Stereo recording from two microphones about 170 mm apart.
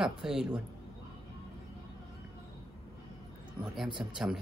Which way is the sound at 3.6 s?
5° right (ahead or behind).